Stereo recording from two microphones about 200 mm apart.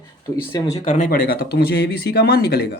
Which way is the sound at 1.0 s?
50° left (ahead or behind).